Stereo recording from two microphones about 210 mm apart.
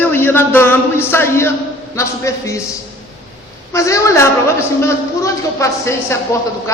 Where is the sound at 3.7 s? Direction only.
15° left (ahead or behind).